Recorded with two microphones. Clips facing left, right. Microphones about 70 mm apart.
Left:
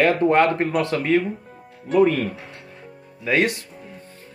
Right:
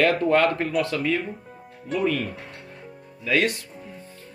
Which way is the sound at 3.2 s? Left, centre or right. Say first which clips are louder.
Left 2 dB; left.